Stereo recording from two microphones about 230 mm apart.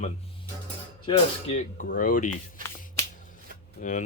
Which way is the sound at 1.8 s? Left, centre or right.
Left.